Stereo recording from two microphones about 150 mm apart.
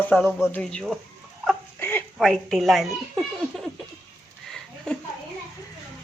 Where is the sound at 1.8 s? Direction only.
15° left (ahead or behind).